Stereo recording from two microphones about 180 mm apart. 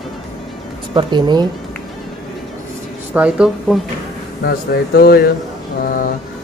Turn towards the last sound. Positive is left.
turn(degrees=50)  # may be behind; listen again after turning